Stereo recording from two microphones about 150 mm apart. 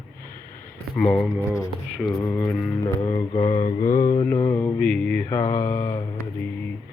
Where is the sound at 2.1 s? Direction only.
20° left (ahead or behind).